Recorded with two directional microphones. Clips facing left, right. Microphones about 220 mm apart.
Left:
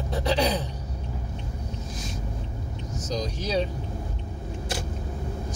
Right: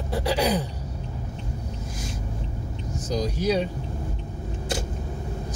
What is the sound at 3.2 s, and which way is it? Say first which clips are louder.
Speech: right 4 dB; 10° right (ahead or behind).